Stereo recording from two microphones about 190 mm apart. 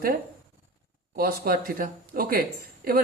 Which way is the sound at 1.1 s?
50° right (ahead or behind).